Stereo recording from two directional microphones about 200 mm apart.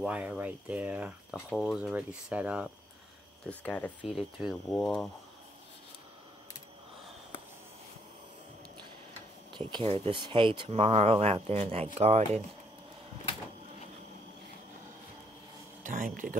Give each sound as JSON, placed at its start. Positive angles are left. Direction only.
{"t": 0.0, "sound": "speech", "side_deg": -5}
{"t": 3.4, "sound": "speech", "side_deg": 5}
{"t": 9.5, "sound": "speech", "side_deg": -25}
{"t": 15.8, "sound": "speech", "side_deg": -40}